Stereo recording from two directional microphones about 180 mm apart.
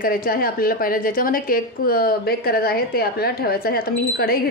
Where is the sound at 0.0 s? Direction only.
55° left (ahead or behind).